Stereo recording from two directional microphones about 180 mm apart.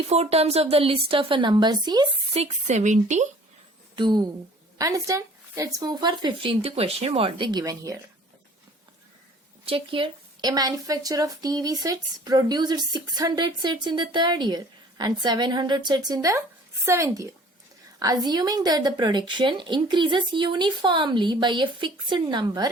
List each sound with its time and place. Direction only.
0.1 s speech: 35° right (ahead or behind)
2.4 s speech: 40° right (ahead or behind)
3.9 s a woman's voice: 25° right (ahead or behind)
9.6 s a woman's voice: 30° right (ahead or behind)